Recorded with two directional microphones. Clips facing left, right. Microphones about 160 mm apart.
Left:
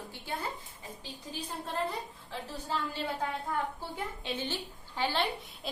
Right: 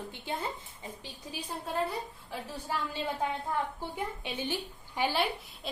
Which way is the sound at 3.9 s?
15° right (ahead or behind).